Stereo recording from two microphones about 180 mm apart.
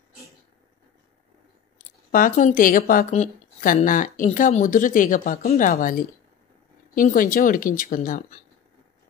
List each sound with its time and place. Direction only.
2.0 s speech: 50° left (ahead or behind)